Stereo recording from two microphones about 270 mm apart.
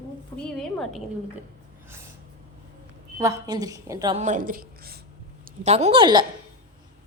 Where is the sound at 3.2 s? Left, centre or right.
Centre.